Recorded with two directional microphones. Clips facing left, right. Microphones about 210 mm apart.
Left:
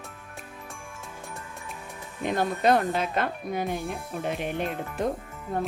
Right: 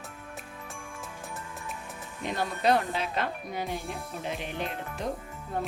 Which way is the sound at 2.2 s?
50° left (ahead or behind).